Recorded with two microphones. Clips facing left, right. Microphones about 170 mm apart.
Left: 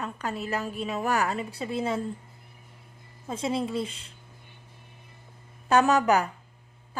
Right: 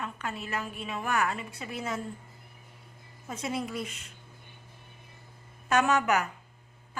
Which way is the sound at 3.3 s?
30° left (ahead or behind).